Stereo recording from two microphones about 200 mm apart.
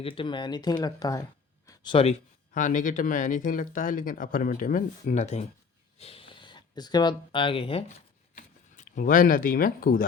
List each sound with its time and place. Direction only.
0.0 s speech: 25° left (ahead or behind)
8.4 s speech: 40° left (ahead or behind)